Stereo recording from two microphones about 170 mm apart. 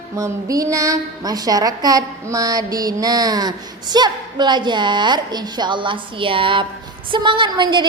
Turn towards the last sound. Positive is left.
turn(degrees=-25)  # may be behind; listen again after turning